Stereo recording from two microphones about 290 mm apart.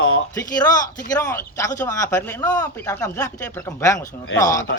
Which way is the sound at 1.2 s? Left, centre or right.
Centre.